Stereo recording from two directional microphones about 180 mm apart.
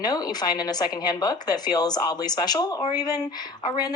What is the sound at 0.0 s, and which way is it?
A woman's voice, 20° left (ahead or behind).